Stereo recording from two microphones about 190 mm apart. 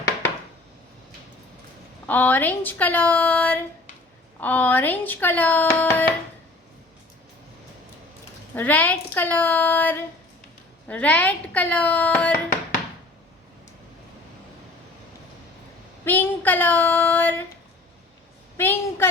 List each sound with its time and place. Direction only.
2.0 s speech: 10° left (ahead or behind)
8.5 s speech: 10° left (ahead or behind)
16.0 s child singing: 10° left (ahead or behind)
18.5 s a woman's voice: 10° left (ahead or behind)